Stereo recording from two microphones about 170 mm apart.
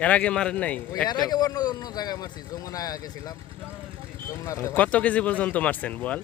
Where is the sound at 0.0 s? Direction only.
10° left (ahead or behind).